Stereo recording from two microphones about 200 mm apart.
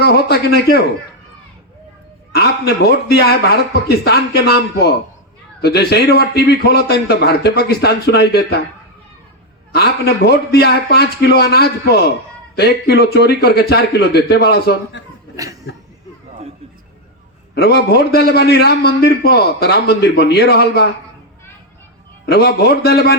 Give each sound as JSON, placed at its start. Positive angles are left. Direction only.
{"t": 0.0, "sound": "a man's voice", "side_deg": 55}
{"t": 2.3, "sound": "a man's voice", "side_deg": 55}
{"t": 9.7, "sound": "a man's voice", "side_deg": 55}
{"t": 15.4, "sound": "speech", "side_deg": -15}
{"t": 17.5, "sound": "a man's voice", "side_deg": 55}
{"t": 22.3, "sound": "a man's voice", "side_deg": 55}